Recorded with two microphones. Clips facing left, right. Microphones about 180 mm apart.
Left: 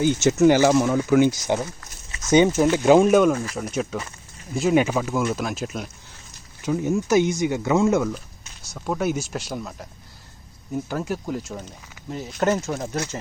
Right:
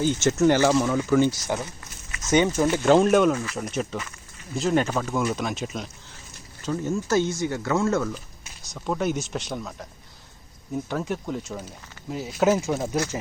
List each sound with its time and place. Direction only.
0.0 s speech: 10° left (ahead or behind)
8.7 s speech: 5° left (ahead or behind)
10.8 s speech: 5° left (ahead or behind)